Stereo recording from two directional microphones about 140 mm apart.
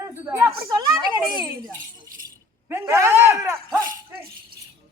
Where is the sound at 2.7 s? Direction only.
20° right (ahead or behind).